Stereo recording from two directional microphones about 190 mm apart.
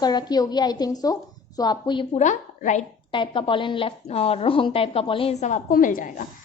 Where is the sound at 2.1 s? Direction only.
40° left (ahead or behind).